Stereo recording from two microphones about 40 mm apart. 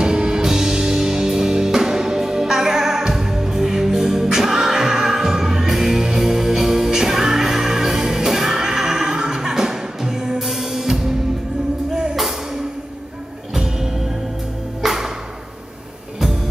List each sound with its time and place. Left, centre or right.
0.0 s music: right
13.6 s music: centre